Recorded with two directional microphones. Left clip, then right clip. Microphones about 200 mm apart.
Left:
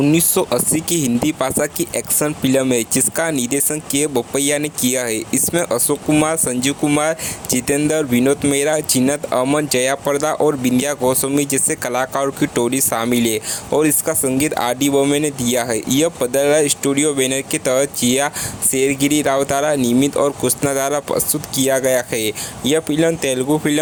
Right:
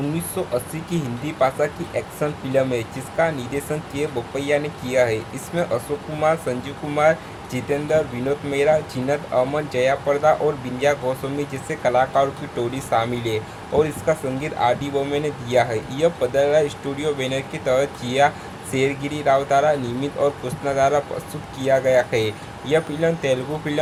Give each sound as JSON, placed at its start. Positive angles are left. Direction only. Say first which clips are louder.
{"t": 0.1, "sound": "speech", "louder": "left 8 dB", "side_deg": 45}